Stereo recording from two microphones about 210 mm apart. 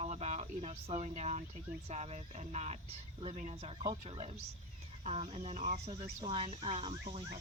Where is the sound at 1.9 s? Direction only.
30° right (ahead or behind).